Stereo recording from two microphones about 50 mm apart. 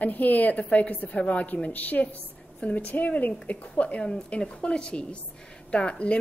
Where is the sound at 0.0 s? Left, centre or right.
Left.